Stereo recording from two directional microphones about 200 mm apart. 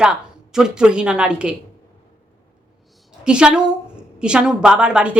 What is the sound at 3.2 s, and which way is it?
A woman's voice, 5° right (ahead or behind).